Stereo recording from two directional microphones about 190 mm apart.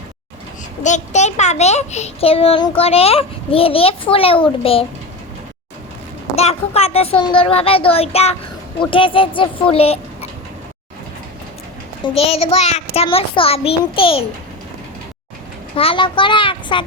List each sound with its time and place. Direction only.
0.8 s a child's voice: 40° left (ahead or behind)
6.3 s a child's voice: 35° left (ahead or behind)
12.0 s a child's voice: 30° left (ahead or behind)
15.7 s speech: 30° left (ahead or behind)